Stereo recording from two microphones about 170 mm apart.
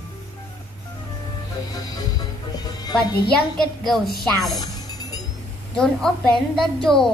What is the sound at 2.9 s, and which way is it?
A woman's voice, centre (ahead or behind).